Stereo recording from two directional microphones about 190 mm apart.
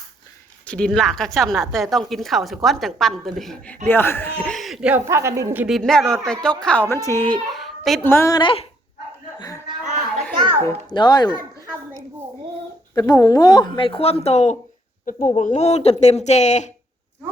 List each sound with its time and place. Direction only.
0.7 s a woman's voice: 5° left (ahead or behind); by 5.6 s 15° right (ahead or behind)
5.6 s a woman's voice: centre (ahead or behind)
8.0 s speech: 15° left (ahead or behind)
10.6 s speech: 20° left (ahead or behind)
12.9 s speech: 20° left (ahead or behind); by 16.6 s 40° left (ahead or behind)